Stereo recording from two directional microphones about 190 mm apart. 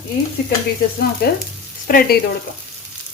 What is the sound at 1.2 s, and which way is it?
Frying, 55° left (ahead or behind).